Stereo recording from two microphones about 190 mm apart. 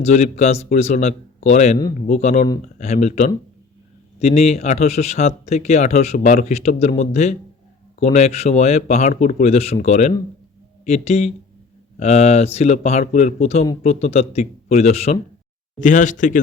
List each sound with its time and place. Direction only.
0.0 s a man's voice: 35° left (ahead or behind)